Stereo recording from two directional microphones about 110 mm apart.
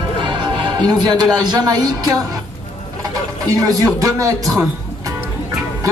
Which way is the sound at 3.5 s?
30° right (ahead or behind).